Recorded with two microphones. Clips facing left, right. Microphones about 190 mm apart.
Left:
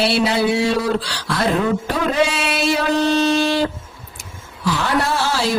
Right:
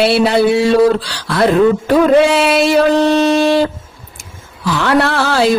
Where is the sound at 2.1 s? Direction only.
60° right (ahead or behind).